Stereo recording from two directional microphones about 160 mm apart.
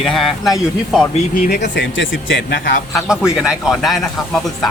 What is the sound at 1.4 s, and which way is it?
Speech, 75° left (ahead or behind).